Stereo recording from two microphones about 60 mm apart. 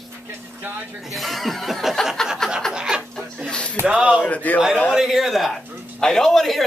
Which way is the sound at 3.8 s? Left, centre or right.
Centre.